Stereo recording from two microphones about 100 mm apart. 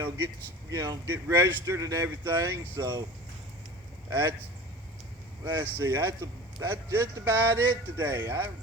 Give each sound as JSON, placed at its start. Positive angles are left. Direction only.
{"t": 0.7, "sound": "speech", "side_deg": -30}
{"t": 4.1, "sound": "speech", "side_deg": -25}
{"t": 5.7, "sound": "speech", "side_deg": -25}